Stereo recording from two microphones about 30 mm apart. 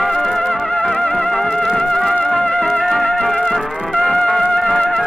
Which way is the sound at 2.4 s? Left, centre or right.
Left.